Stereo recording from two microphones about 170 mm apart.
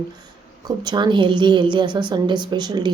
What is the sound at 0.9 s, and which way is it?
A woman's voice, 25° right (ahead or behind).